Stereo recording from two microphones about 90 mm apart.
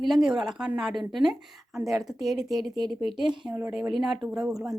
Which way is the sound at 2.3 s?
45° right (ahead or behind).